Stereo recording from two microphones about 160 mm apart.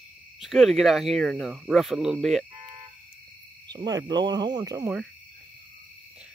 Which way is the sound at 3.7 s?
25° right (ahead or behind).